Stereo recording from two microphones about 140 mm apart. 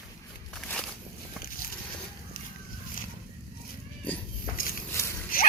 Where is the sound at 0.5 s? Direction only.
5° left (ahead or behind).